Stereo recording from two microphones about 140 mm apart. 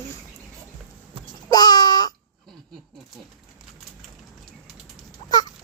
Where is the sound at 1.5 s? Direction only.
30° left (ahead or behind).